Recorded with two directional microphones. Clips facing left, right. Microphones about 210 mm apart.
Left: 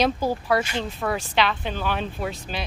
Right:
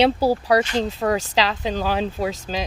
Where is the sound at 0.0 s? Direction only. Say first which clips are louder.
Right 5 dB; 35° right (ahead or behind).